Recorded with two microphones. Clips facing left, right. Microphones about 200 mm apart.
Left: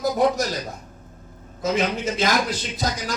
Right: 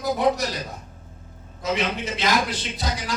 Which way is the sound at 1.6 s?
45° left (ahead or behind).